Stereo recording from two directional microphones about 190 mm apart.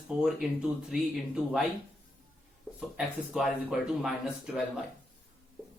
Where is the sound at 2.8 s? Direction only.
5° right (ahead or behind).